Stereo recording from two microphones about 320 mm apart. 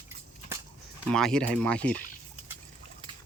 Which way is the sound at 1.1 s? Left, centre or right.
Centre.